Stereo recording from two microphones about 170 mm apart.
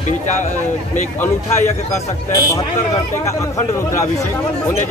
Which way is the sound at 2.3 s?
20° left (ahead or behind).